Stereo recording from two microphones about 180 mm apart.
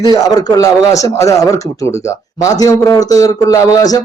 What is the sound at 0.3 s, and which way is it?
Speech, 20° left (ahead or behind).